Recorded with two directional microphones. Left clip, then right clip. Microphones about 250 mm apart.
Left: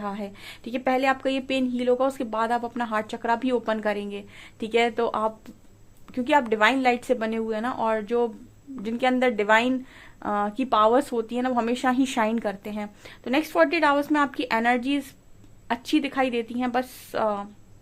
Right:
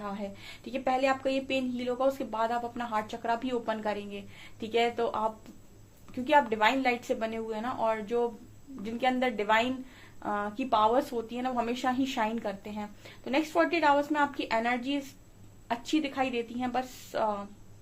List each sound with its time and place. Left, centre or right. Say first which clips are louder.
0.0 s speech: left 5 dB; left